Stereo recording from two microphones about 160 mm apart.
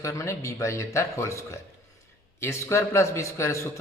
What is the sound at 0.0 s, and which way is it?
Speech, 20° left (ahead or behind).